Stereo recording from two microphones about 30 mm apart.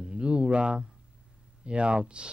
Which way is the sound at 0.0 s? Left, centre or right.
Right.